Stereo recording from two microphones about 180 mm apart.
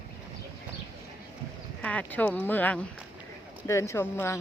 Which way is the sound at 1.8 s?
5° left (ahead or behind).